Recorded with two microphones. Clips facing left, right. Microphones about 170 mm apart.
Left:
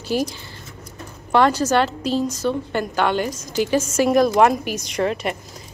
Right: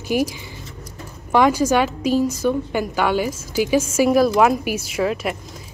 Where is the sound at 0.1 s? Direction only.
15° right (ahead or behind).